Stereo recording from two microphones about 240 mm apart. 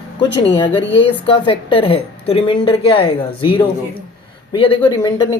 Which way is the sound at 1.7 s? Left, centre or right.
Left.